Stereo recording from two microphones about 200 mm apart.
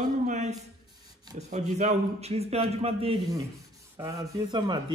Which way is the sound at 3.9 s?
20° right (ahead or behind).